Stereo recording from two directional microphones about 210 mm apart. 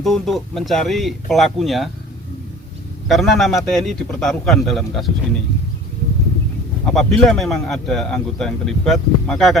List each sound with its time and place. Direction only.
0.0 s speech: centre (ahead or behind)
3.1 s speech: centre (ahead or behind)
6.9 s speech: centre (ahead or behind)